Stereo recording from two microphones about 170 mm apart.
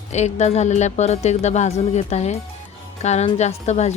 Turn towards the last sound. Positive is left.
turn(degrees=40)  # may be behind; listen again after turning